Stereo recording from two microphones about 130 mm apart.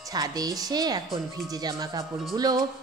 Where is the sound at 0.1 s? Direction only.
30° right (ahead or behind).